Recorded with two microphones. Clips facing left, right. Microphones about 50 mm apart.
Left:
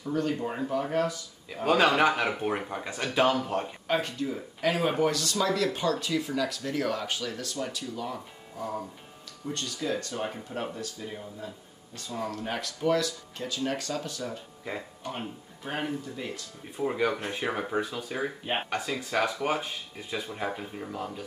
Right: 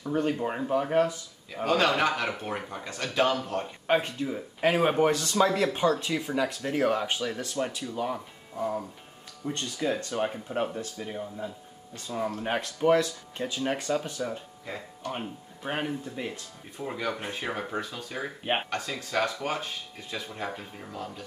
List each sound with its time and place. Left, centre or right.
0.1 s speech: right
1.5 s a man's voice: centre
3.8 s speech: right
15.0 s speech: centre
16.7 s speech: centre